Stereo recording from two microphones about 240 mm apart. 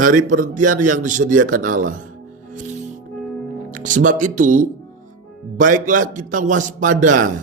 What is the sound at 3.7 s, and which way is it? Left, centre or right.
Speech, right.